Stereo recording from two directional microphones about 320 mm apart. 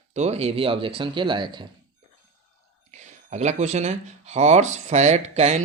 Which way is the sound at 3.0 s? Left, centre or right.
Right.